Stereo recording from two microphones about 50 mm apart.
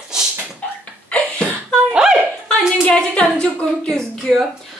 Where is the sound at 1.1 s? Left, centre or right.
Left.